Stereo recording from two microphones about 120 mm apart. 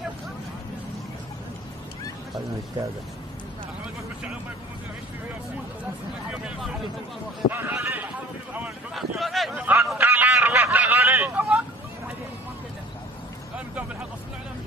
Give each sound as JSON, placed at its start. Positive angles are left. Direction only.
{"t": 6.3, "sound": "speech", "side_deg": -10}
{"t": 7.5, "sound": "speech", "side_deg": -20}
{"t": 8.5, "sound": "speech", "side_deg": -5}
{"t": 9.6, "sound": "speech", "side_deg": -15}
{"t": 9.9, "sound": "vehicle", "side_deg": -15}